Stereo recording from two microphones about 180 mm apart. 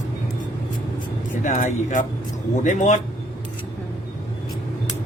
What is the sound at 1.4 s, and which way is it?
Speech, 45° left (ahead or behind).